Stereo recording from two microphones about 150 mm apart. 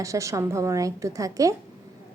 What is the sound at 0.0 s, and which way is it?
Speech, 20° right (ahead or behind).